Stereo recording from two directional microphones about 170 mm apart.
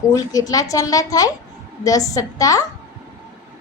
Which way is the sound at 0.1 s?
20° left (ahead or behind).